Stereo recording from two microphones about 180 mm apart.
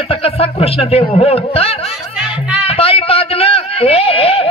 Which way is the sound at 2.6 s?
30° left (ahead or behind).